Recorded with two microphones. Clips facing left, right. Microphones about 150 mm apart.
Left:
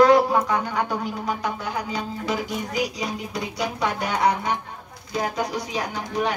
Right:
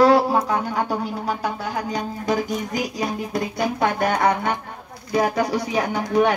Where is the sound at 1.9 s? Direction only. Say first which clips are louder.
Right 4 dB; 45° right (ahead or behind).